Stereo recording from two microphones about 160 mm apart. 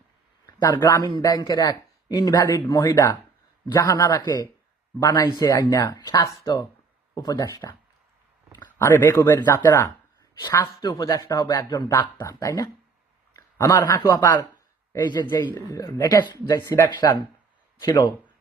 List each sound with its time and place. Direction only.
0.4 s a man's voice: 25° left (ahead or behind)